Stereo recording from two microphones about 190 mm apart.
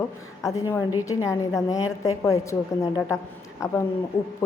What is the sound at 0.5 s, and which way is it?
A woman's voice, 15° left (ahead or behind).